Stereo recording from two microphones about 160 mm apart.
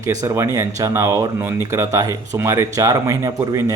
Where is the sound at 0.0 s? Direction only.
20° right (ahead or behind).